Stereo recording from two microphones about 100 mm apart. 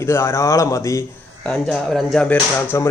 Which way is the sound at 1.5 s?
5° left (ahead or behind).